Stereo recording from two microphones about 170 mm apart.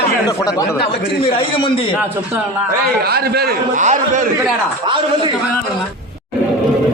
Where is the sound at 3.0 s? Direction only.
65° right (ahead or behind).